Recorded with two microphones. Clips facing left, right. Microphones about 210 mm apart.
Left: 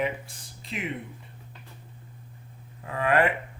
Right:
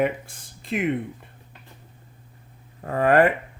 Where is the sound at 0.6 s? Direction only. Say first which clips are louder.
Right 10 dB; 55° right (ahead or behind).